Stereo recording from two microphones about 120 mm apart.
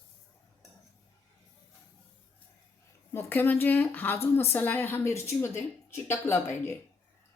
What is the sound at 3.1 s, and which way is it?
A woman's voice, 20° left (ahead or behind).